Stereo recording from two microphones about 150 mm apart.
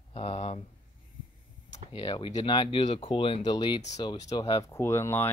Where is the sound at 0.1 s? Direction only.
45° left (ahead or behind).